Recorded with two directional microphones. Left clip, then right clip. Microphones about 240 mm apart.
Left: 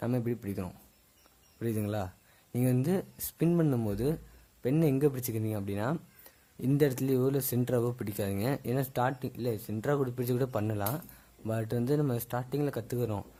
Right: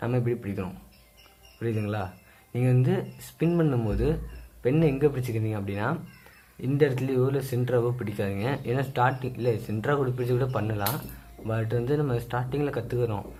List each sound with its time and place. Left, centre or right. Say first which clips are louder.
0.0 s speech: right 5 dB; left